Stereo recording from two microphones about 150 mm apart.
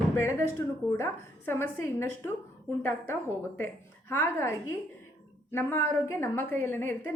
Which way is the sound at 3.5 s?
15° left (ahead or behind).